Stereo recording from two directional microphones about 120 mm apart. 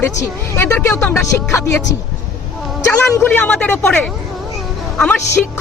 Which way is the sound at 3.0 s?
20° left (ahead or behind).